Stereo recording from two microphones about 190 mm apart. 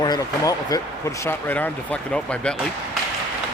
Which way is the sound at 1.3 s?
10° left (ahead or behind).